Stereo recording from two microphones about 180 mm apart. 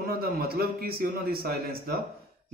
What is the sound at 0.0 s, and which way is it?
A man's voice, 55° right (ahead or behind).